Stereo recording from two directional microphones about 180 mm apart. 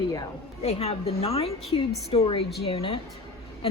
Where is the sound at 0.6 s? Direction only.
35° left (ahead or behind).